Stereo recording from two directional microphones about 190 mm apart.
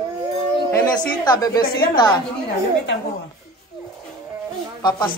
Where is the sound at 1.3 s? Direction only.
20° left (ahead or behind).